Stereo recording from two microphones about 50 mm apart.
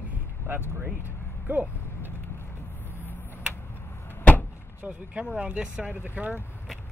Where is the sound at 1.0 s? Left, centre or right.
Right.